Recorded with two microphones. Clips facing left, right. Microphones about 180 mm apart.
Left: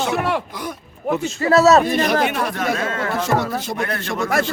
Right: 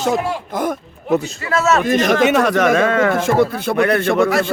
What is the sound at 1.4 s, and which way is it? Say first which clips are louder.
Speech: left 4 dB; 40° left (ahead or behind).